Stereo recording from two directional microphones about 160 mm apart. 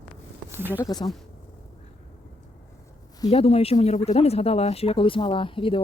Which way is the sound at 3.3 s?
40° left (ahead or behind).